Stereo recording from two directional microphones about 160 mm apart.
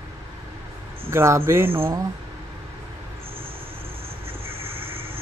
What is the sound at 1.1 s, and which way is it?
Speech, 15° right (ahead or behind).